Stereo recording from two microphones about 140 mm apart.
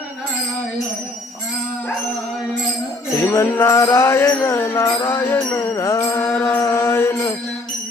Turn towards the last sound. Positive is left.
turn(degrees=20)  # may be behind; listen again after turning